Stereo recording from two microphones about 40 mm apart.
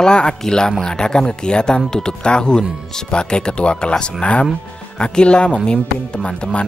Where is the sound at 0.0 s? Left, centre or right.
Centre.